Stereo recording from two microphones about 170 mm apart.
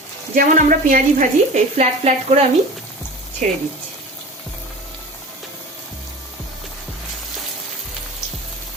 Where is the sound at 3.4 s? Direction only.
45° right (ahead or behind).